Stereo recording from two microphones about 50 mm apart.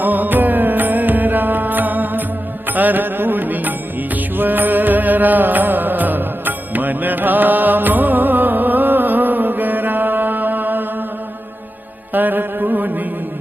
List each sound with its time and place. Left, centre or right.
0.0 s music: right
12.1 s music: right